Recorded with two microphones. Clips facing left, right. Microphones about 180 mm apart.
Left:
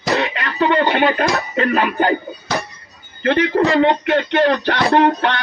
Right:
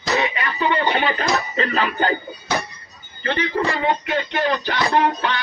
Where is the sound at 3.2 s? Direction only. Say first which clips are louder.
Left 7 dB; 55° left (ahead or behind).